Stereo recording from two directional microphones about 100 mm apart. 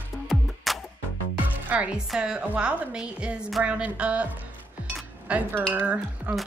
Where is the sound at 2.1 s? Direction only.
10° right (ahead or behind).